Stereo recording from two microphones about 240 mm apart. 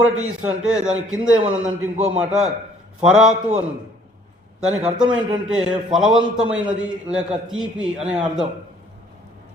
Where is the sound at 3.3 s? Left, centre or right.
Right.